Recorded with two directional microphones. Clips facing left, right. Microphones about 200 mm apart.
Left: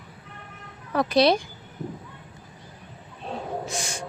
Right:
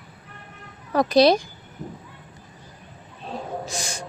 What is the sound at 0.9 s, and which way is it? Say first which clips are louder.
Speech: right 3 dB; 40° right (ahead or behind).